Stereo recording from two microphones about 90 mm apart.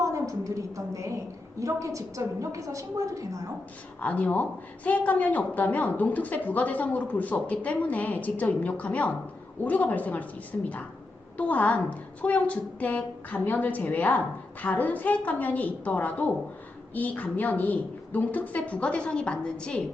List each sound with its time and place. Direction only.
0.0 s a woman's voice: 40° right (ahead or behind)
4.0 s a woman's voice: 15° left (ahead or behind)